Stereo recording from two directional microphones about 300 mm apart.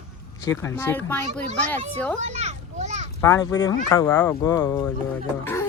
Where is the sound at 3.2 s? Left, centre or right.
Centre.